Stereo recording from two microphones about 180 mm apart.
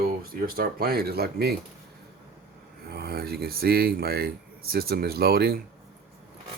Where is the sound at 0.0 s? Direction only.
55° right (ahead or behind).